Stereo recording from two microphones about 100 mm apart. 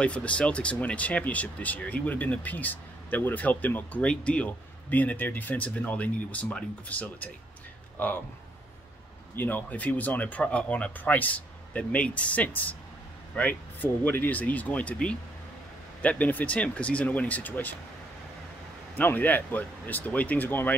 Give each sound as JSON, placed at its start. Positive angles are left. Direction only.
{"t": 0.0, "sound": "speech", "side_deg": 10}
{"t": 9.3, "sound": "speech", "side_deg": 20}
{"t": 18.9, "sound": "speech", "side_deg": 20}